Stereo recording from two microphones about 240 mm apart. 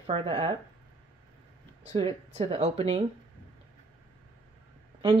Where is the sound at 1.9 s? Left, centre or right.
Right.